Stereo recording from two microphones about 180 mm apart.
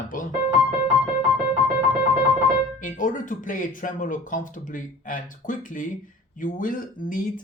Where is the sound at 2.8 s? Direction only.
45° left (ahead or behind).